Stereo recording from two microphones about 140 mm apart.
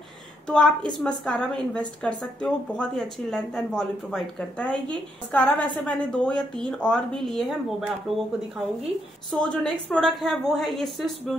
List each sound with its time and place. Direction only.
0.5 s a woman's voice: 5° left (ahead or behind)
9.3 s a woman's voice: 5° left (ahead or behind)